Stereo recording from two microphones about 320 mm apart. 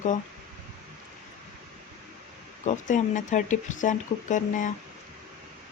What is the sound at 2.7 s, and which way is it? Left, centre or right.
Speech, left.